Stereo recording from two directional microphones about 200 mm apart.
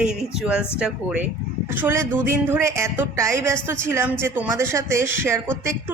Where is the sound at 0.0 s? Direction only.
5° right (ahead or behind).